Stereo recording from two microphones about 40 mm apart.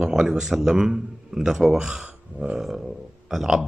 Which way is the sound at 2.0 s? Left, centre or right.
Right.